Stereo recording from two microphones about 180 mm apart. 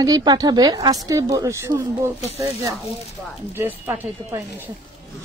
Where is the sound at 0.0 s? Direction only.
20° right (ahead or behind).